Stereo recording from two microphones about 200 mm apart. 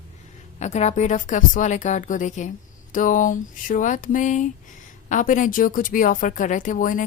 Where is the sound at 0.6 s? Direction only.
35° left (ahead or behind).